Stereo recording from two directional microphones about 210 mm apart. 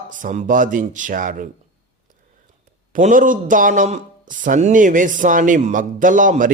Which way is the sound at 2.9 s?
40° right (ahead or behind).